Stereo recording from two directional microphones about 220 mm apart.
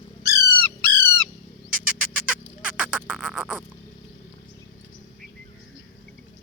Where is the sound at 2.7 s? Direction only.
5° right (ahead or behind).